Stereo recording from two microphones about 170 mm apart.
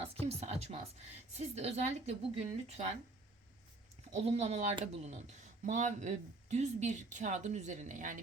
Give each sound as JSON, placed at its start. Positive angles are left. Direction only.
{"t": 0.0, "sound": "a woman's voice", "side_deg": -35}
{"t": 4.1, "sound": "a woman's voice", "side_deg": -40}